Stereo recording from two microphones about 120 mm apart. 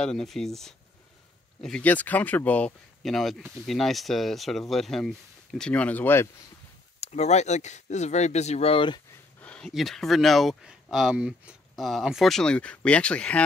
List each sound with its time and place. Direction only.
0.0 s speech: 5° left (ahead or behind)
3.0 s speech: centre (ahead or behind)
7.0 s speech: 65° left (ahead or behind); by 9.0 s 45° left (ahead or behind)
9.4 s a sound: 10° left (ahead or behind)
9.7 s speech: centre (ahead or behind)